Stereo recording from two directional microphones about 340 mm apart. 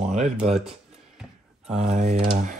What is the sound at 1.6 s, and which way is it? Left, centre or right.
Speech, centre.